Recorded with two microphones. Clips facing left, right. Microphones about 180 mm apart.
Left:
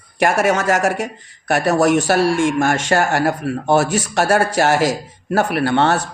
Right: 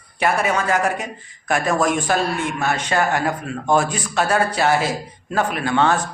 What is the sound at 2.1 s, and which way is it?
A man's voice, 85° left.